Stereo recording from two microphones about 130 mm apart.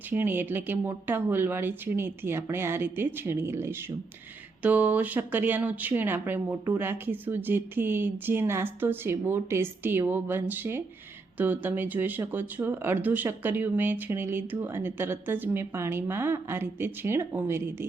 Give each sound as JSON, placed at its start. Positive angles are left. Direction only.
{"t": 0.1, "sound": "speech", "side_deg": -15}